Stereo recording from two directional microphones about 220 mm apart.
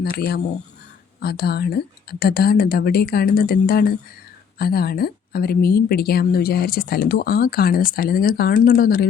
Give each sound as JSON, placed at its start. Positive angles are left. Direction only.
{"t": 0.0, "sound": "speech", "side_deg": 45}